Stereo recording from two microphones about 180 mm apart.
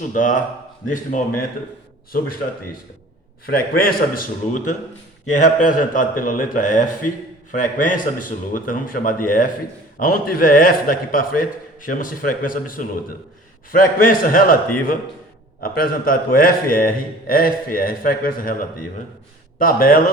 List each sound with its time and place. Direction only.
0.1 s a man's voice: 45° left (ahead or behind)
3.4 s a man's voice: 55° left (ahead or behind)
19.5 s speech: 55° left (ahead or behind)